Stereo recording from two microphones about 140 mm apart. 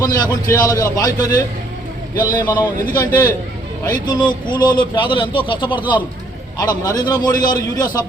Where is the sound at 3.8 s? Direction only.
30° left (ahead or behind).